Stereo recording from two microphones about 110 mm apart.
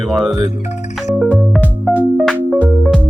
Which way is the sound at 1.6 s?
15° left (ahead or behind).